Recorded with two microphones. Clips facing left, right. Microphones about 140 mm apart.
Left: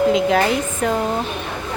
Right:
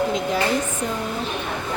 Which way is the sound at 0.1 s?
85° left.